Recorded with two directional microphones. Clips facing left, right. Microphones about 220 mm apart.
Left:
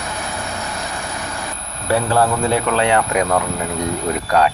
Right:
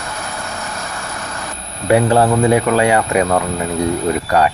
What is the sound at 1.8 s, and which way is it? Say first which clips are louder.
Speech: right 5 dB; 20° right (ahead or behind).